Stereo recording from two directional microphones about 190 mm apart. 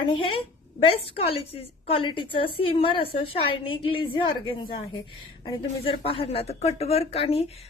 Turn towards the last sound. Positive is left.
turn(degrees=30)  # may be behind; listen again after turning